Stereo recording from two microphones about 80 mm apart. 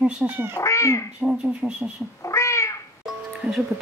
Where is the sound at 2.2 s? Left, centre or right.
Left.